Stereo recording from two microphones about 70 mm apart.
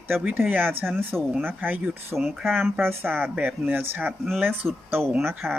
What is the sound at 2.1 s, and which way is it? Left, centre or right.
Speech, centre.